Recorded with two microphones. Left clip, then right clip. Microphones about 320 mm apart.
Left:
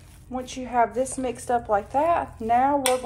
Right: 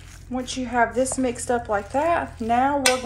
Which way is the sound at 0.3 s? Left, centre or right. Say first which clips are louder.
Right 2 dB; centre.